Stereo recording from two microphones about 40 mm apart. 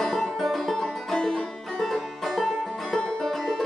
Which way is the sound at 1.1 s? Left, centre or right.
Centre.